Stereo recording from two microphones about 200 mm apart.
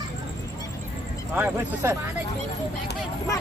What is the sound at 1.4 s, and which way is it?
Speech, 10° right (ahead or behind).